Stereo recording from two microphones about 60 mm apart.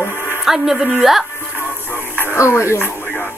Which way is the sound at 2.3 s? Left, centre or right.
Left.